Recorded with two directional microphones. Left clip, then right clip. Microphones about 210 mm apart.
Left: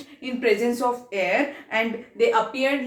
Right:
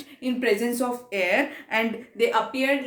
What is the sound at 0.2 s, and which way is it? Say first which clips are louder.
A woman's voice: left 2 dB; 50° right (ahead or behind).